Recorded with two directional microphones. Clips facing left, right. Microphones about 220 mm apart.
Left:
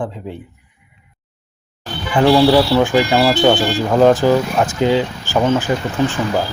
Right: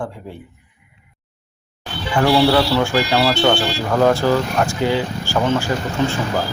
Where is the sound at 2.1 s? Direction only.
15° left (ahead or behind).